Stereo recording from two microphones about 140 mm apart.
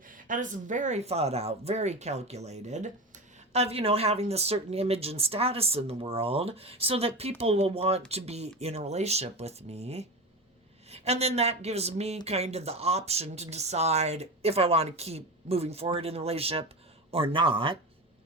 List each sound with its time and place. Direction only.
0.1 s speech: 70° right (ahead or behind); by 17.7 s 40° right (ahead or behind)